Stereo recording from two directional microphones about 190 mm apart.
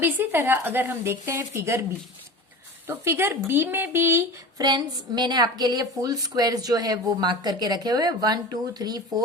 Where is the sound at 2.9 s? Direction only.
15° right (ahead or behind).